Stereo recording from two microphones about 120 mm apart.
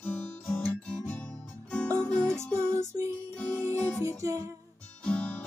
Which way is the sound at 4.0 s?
25° right (ahead or behind).